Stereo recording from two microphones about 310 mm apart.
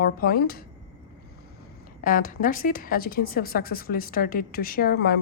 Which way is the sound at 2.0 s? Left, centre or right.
Left.